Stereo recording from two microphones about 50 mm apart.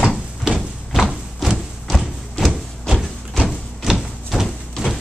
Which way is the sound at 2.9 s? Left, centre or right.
Centre.